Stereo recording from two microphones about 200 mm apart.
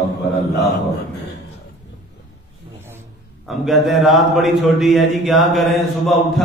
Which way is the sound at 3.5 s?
Centre (ahead or behind).